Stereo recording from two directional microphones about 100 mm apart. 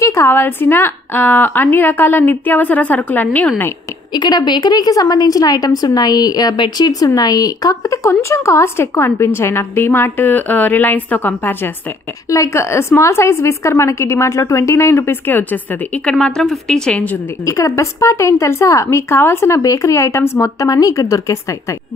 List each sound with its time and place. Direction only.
0.0 s a woman's voice: 30° left (ahead or behind)
4.1 s a woman's voice: 45° left (ahead or behind)
6.5 s speech: 50° left (ahead or behind)
6.9 s a woman's voice: 35° left (ahead or behind); by 11.7 s 20° left (ahead or behind)
12.3 s a woman's voice: 30° left (ahead or behind); by 17.2 s 15° left (ahead or behind)
17.5 s a woman's voice: 35° left (ahead or behind)